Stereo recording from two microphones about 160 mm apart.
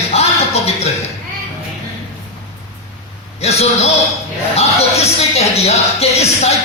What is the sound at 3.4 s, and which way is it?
Speech, 40° left (ahead or behind).